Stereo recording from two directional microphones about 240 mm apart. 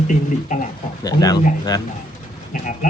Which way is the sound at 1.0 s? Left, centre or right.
Centre.